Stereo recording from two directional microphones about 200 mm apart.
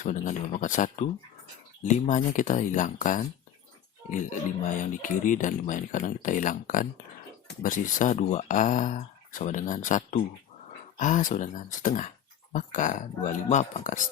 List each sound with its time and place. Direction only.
0.0 s speech: 35° left (ahead or behind)